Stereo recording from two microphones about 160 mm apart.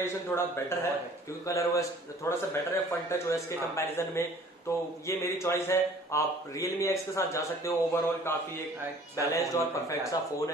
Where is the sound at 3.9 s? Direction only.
15° left (ahead or behind).